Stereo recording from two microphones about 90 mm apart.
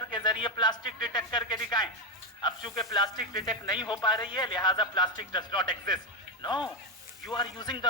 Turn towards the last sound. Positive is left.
turn(degrees=55)  # may be behind; listen again after turning